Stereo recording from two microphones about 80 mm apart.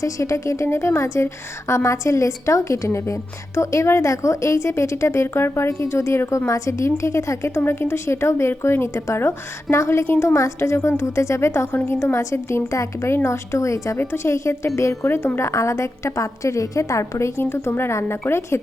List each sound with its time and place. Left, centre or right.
0.0 s a woman's voice: left